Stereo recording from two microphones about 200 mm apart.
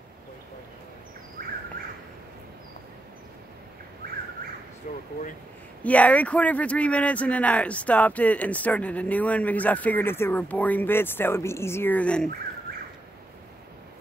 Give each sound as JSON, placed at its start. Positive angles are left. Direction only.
{"t": 1.4, "sound": "bird", "side_deg": -45}
{"t": 4.9, "sound": "speech", "side_deg": 40}
{"t": 5.9, "sound": "speech", "side_deg": 5}